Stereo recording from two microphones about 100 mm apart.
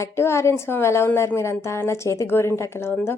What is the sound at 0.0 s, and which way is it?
A woman's voice, 25° left (ahead or behind).